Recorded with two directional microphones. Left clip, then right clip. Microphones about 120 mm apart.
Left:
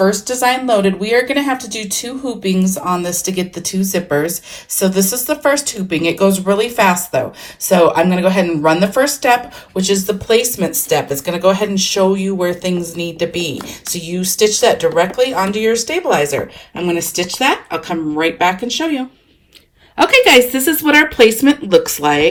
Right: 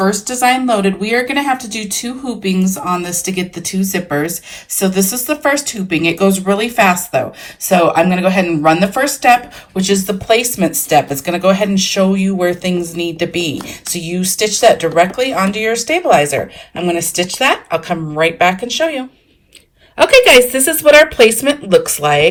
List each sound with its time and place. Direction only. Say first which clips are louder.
0.0 s speech: even; 20° left (ahead or behind)
16.7 s speech: right 2 dB; 15° left (ahead or behind); by 21.8 s centre (ahead or behind)